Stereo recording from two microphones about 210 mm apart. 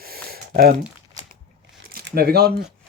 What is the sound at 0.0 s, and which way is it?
Typing, 45° right (ahead or behind).